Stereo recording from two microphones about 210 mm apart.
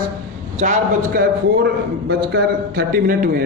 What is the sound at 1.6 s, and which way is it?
A man's voice, 55° right (ahead or behind).